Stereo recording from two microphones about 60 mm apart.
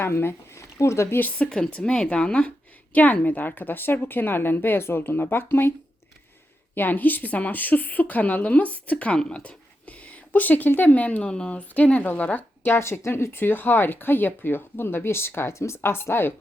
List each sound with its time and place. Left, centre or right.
0.0 s speech: left
1.5 s speech: centre; by 5.7 s left
6.7 s a woman's voice: left; by 11.6 s centre
11.7 s a woman's voice: left
12.7 s speech: left